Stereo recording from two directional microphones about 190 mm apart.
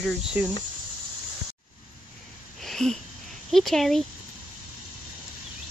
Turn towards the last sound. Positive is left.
turn(degrees=0)  # may be behind; listen again after turning